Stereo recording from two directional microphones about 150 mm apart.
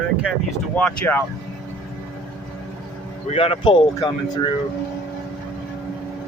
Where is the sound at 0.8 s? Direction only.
10° left (ahead or behind).